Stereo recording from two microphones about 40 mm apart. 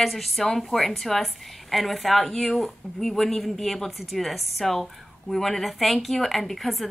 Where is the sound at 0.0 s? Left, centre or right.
Centre.